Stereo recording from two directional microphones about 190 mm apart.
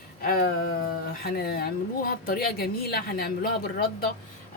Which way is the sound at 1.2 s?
55° left (ahead or behind).